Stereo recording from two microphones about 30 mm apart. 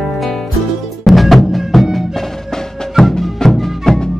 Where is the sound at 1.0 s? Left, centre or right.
Centre.